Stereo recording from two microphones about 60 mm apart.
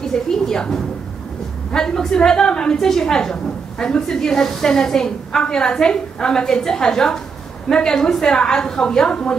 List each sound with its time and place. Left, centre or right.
0.0 s a woman's voice: centre